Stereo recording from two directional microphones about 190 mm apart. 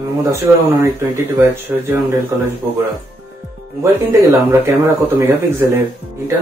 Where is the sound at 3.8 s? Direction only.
15° right (ahead or behind).